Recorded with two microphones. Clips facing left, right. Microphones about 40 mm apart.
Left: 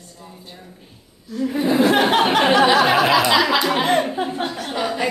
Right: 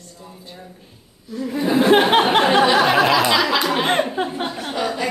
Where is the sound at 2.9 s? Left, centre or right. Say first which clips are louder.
Even; centre.